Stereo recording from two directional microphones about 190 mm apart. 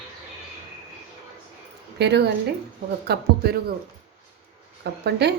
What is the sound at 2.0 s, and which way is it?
A woman's voice, 60° right (ahead or behind).